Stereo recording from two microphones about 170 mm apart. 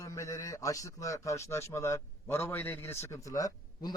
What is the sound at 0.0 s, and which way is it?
A man's voice, 20° left (ahead or behind).